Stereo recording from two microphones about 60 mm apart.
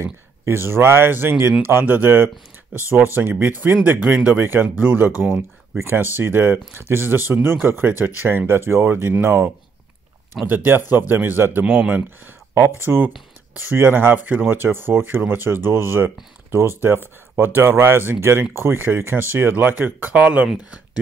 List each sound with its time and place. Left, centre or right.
0.0 s speech: right